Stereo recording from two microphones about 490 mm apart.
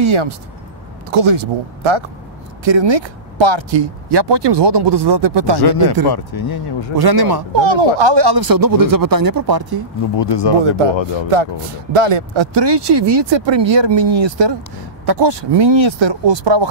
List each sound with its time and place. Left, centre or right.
0.0 s speech: right
5.6 s speech: left
7.0 s speech: right
10.1 s speech: left
11.3 s speech: right